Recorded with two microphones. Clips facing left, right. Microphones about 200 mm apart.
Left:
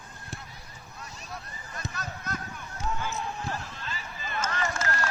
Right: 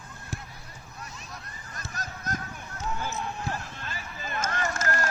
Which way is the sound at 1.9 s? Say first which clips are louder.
Right 4 dB; 45° right (ahead or behind).